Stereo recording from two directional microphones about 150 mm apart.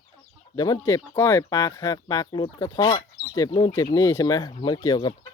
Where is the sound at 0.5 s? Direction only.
25° left (ahead or behind).